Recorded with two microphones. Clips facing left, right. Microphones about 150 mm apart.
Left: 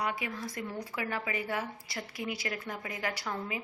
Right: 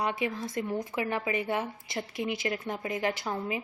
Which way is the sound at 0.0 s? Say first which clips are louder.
Right 4 dB; 25° right (ahead or behind).